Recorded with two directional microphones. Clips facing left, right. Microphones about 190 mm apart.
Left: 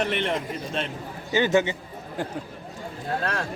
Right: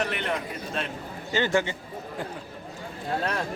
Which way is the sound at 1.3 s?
15° left (ahead or behind).